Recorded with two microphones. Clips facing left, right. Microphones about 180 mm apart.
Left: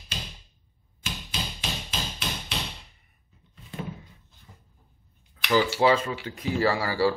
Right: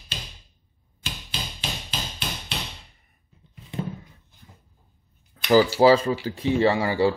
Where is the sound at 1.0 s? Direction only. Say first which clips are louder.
Even; 35° right (ahead or behind).